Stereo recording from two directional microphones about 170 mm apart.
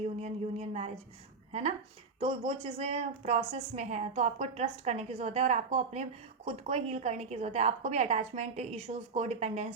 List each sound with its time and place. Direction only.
0.2 s speech: 40° right (ahead or behind)
2.1 s a woman's voice: 35° right (ahead or behind)